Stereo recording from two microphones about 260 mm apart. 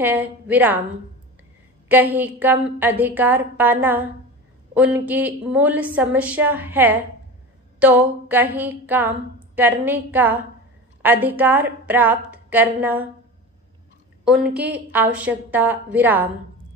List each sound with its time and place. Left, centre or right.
0.0 s a woman's voice: centre
1.9 s a woman's voice: centre
14.2 s a woman's voice: centre